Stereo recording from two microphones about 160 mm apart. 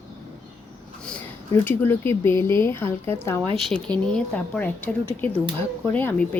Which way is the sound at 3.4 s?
30° right (ahead or behind).